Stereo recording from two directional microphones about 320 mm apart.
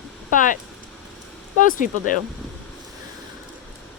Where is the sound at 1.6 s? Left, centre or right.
Left.